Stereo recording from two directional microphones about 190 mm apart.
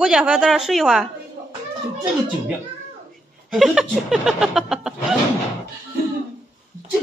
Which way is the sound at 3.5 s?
Centre (ahead or behind).